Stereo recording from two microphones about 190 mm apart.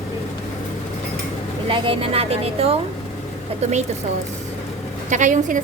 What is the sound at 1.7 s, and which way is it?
A woman's voice, 25° right (ahead or behind).